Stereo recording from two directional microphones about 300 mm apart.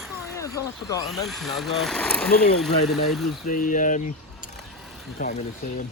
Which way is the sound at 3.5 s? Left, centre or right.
Left.